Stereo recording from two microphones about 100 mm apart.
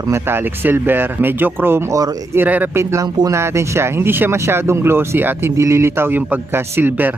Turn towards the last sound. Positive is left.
turn(degrees=-20)  # may be behind; listen again after turning